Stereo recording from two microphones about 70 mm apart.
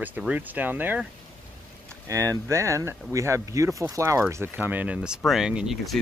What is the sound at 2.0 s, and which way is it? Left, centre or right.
Speech, right.